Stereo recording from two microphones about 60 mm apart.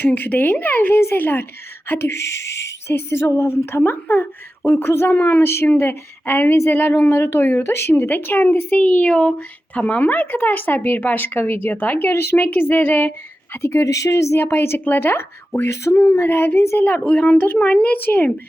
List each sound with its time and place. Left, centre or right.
0.0 s speech: left
2.8 s speech: left
4.8 s speech: left
5.1 s speech: left
8.7 s speech: left
14.3 s speech: left
16.1 s speech: left
17.2 s speech: left